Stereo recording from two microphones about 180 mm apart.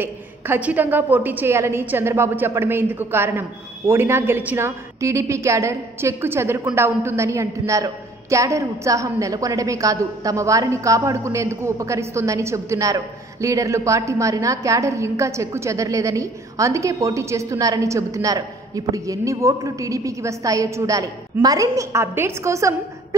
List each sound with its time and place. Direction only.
0.0 s a woman's voice: 10° right (ahead or behind)